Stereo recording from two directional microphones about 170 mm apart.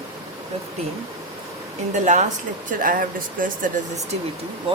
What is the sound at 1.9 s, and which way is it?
Speech, 45° right (ahead or behind).